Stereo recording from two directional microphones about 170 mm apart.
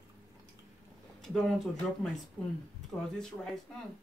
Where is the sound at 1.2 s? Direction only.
Centre (ahead or behind).